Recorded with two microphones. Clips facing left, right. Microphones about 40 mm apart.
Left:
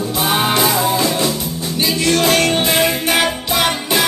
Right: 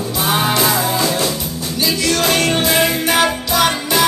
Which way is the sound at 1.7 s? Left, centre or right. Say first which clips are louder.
Left 1 dB; left.